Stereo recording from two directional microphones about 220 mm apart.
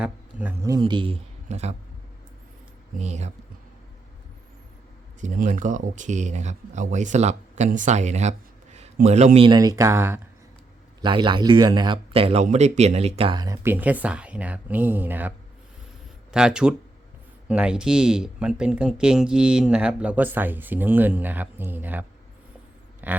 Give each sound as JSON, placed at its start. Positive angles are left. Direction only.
{"t": 0.0, "sound": "speech", "side_deg": -5}
{"t": 3.0, "sound": "speech", "side_deg": -30}
{"t": 5.2, "sound": "speech", "side_deg": -35}
{"t": 11.0, "sound": "speech", "side_deg": -20}
{"t": 16.3, "sound": "speech", "side_deg": -5}
{"t": 23.0, "sound": "speech", "side_deg": -10}